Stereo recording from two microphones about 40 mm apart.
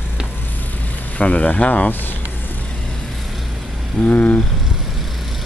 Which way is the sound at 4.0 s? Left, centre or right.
Left.